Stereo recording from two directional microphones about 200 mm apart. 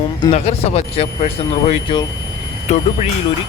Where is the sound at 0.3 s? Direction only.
30° left (ahead or behind).